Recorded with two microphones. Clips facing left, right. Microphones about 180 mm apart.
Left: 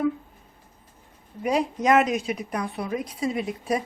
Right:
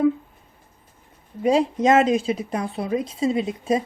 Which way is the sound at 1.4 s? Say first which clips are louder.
Right 5 dB; 25° right (ahead or behind).